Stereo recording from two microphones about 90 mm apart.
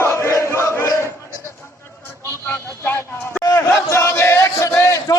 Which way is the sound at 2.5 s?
25° left (ahead or behind).